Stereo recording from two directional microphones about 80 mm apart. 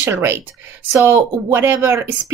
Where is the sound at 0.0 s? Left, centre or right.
Right.